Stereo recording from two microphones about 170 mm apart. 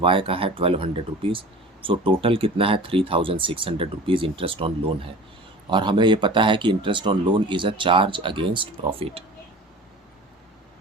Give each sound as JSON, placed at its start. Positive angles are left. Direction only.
{"t": 0.0, "sound": "speech", "side_deg": -30}
{"t": 5.7, "sound": "speech", "side_deg": -30}